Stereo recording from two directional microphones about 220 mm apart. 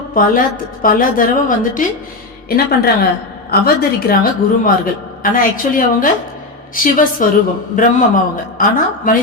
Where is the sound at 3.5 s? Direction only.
45° left (ahead or behind).